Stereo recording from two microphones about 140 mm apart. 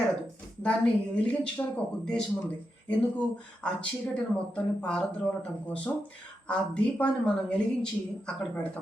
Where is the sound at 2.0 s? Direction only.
10° left (ahead or behind).